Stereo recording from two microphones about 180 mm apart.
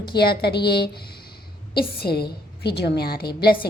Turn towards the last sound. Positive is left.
turn(degrees=60)  # may be behind; listen again after turning